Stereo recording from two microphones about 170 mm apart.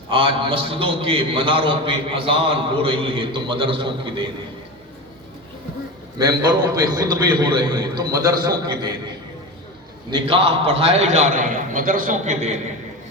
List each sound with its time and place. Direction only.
0.1 s a man's voice: 30° right (ahead or behind)
6.1 s a man's voice: 20° right (ahead or behind)
10.1 s a man's voice: 30° right (ahead or behind)